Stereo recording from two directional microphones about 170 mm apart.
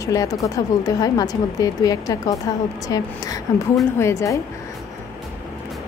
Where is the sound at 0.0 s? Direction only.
20° left (ahead or behind).